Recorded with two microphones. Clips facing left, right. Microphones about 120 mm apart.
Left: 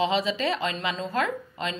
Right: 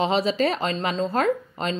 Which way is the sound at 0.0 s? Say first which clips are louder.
Right 3 dB; 40° right (ahead or behind).